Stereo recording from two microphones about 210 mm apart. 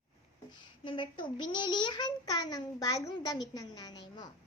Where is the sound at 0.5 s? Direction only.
25° left (ahead or behind).